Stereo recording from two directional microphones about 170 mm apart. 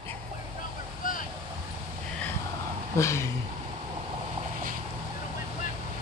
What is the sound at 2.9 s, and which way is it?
Speech, 15° left (ahead or behind).